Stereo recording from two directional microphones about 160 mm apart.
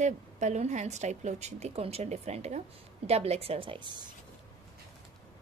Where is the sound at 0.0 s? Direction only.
50° right (ahead or behind); by 4.1 s 30° right (ahead or behind).